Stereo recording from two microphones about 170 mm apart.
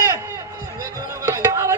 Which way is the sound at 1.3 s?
15° right (ahead or behind).